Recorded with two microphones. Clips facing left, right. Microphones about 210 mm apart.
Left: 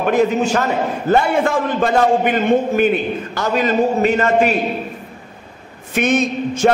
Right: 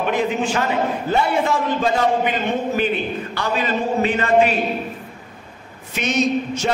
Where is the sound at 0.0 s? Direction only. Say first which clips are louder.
Left 5 dB; 45° left (ahead or behind).